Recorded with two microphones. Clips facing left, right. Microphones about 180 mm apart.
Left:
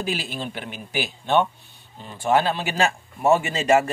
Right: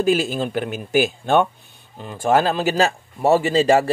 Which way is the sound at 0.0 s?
45° right (ahead or behind).